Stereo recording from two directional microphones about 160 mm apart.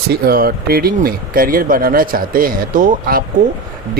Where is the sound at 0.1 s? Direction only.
70° right (ahead or behind).